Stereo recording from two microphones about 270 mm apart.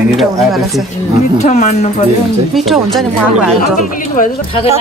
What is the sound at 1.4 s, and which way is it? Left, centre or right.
Speech, left.